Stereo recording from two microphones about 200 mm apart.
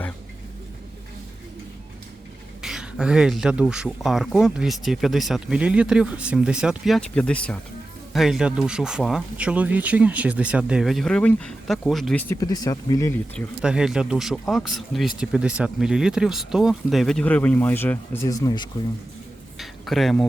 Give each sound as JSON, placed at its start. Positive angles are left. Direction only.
{"t": 2.6, "sound": "speech", "side_deg": -5}
{"t": 12.3, "sound": "speech", "side_deg": 20}
{"t": 13.6, "sound": "speech", "side_deg": -5}
{"t": 19.5, "sound": "a sound", "side_deg": 0}